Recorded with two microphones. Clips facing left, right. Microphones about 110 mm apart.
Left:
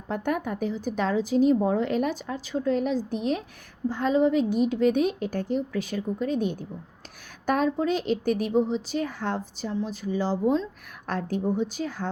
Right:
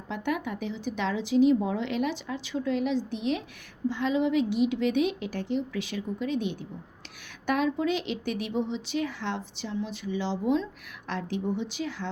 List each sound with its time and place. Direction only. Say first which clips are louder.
0.1 s a woman's voice: left 3 dB; 45° left (ahead or behind)